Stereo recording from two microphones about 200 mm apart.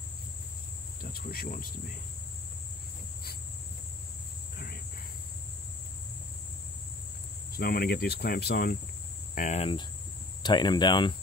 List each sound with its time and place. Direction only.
1.1 s cricket: 50° left (ahead or behind)
7.5 s cricket: 50° left (ahead or behind)
9.3 s speech: 40° left (ahead or behind); by 11.1 s 25° left (ahead or behind)